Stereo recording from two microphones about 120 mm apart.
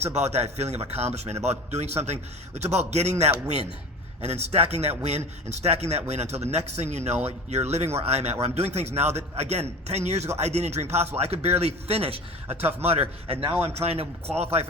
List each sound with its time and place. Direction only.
0.0 s a man's voice: 65° right (ahead or behind)